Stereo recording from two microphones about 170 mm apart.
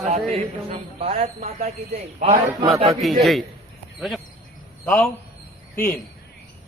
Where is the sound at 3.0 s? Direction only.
Centre (ahead or behind).